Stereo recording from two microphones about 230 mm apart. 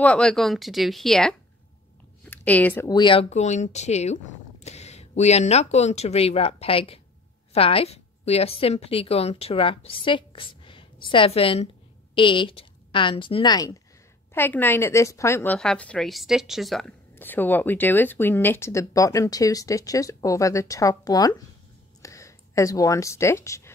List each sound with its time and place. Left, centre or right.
0.0 s a woman's voice: centre
14.3 s a woman's voice: centre